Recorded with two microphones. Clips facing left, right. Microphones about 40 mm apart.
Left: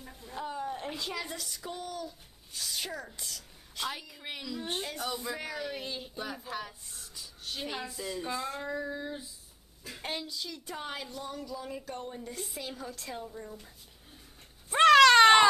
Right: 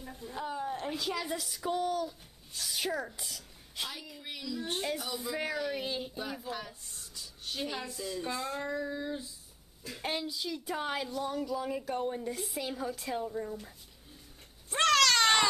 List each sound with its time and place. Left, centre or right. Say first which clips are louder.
0.0 s speech: right 1 dB; centre
2.0 s speech: right 5 dB; centre
4.2 s a sound: left 2 dB; left
4.5 s speech: right 1 dB; left
4.8 s a woman's voice: even; centre
12.3 s a woman's voice: right 4 dB; centre
14.7 s cat: left 7 dB; centre